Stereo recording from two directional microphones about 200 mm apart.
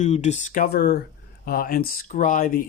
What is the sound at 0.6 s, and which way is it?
Speech, 55° left (ahead or behind).